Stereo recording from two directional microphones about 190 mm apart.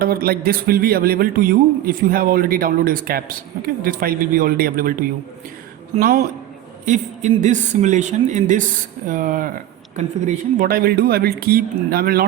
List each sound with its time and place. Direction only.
0.0 s speech: 50° right (ahead or behind)